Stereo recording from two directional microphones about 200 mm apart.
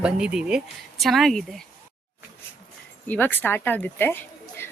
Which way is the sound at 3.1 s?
10° left (ahead or behind).